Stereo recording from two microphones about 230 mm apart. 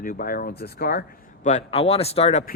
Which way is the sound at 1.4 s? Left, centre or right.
Left.